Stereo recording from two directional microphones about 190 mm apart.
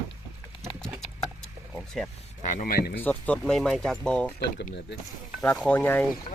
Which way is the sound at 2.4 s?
40° left (ahead or behind).